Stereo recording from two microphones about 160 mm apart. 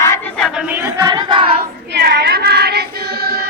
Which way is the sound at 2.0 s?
90° right.